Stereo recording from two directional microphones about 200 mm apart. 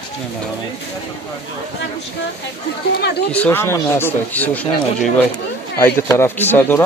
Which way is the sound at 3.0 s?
55° left (ahead or behind).